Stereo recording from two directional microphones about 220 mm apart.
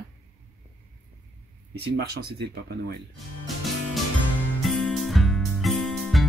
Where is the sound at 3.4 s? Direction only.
Centre (ahead or behind).